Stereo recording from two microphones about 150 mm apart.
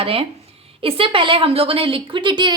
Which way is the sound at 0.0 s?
40° right (ahead or behind).